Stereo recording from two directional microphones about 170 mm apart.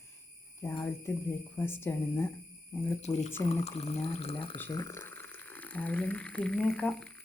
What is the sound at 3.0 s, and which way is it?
Speech, 40° left (ahead or behind).